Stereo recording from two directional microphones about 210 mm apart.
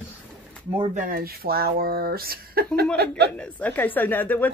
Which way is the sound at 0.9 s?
40° right (ahead or behind).